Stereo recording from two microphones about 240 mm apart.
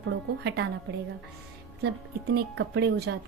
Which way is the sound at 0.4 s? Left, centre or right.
Right.